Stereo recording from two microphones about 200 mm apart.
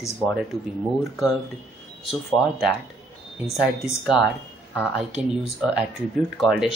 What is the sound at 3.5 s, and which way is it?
Speech, centre (ahead or behind).